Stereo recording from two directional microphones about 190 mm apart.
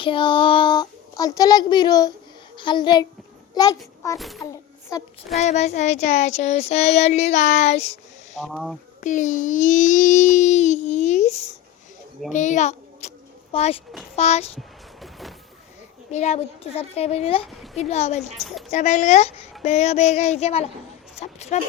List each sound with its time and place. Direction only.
0.0 s a child's voice: 25° left (ahead or behind)
4.2 s a woman's voice: centre (ahead or behind)
4.5 s a sound: 15° left (ahead or behind)
5.3 s child singing: 35° left (ahead or behind)
8.4 s a woman's voice: centre (ahead or behind)
9.0 s child singing: 40° left (ahead or behind)
12.3 s a sound: 40° left (ahead or behind)
14.2 s child singing: 35° left (ahead or behind)
15.0 s vehicle: centre (ahead or behind)
16.1 s child singing: 35° left (ahead or behind)
18.2 s a woman's voice: centre (ahead or behind)
18.7 s child singing: 40° left (ahead or behind)